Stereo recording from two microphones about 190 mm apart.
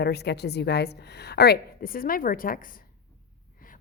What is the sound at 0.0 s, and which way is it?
A woman's voice, 60° left (ahead or behind).